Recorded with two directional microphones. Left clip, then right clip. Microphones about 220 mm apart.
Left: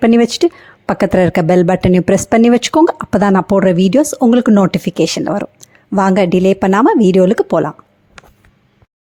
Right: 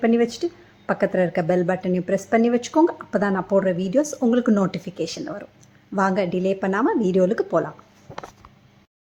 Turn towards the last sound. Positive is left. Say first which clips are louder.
# left 8 dB
turn(degrees=40)  # may be behind; listen again after turning